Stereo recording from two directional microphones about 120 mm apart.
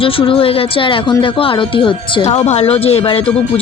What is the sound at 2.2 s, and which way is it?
Speech, 65° left (ahead or behind).